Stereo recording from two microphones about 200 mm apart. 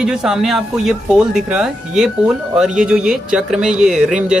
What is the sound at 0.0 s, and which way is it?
Speech, 5° right (ahead or behind).